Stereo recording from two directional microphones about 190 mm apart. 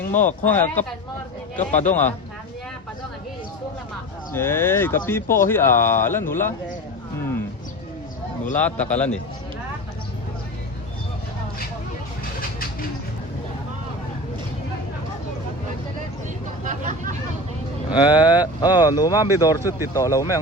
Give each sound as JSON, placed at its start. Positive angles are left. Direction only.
{"t": 0.0, "sound": "speech", "side_deg": 40}
{"t": 0.4, "sound": "speech", "side_deg": 10}
{"t": 4.3, "sound": "speech", "side_deg": 10}
{"t": 8.5, "sound": "speech", "side_deg": 5}
{"t": 16.6, "sound": "vehicle", "side_deg": -40}
{"t": 17.9, "sound": "speech", "side_deg": 20}